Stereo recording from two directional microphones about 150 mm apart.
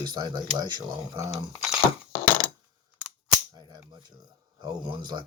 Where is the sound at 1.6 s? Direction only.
5° right (ahead or behind).